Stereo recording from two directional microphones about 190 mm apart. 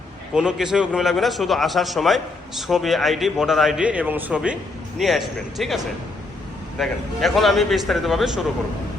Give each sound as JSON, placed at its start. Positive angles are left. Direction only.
{"t": 0.3, "sound": "a man's voice", "side_deg": -5}